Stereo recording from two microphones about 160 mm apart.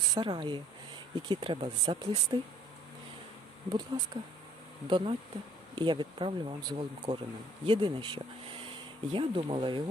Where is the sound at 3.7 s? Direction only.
25° right (ahead or behind).